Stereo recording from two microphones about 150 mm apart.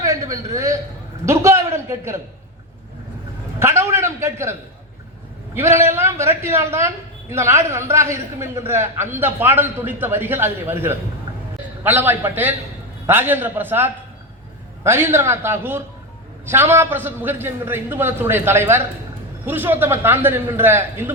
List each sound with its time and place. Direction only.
0.0 s a man's voice: 20° right (ahead or behind)
3.6 s a man's voice: 15° right (ahead or behind)
5.5 s a man's voice: 15° right (ahead or behind)